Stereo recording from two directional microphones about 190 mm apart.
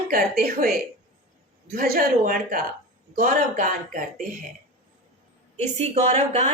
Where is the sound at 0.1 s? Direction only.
50° right (ahead or behind).